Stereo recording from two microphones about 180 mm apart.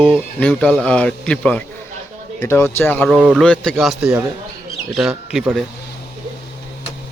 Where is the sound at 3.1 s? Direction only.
5° right (ahead or behind).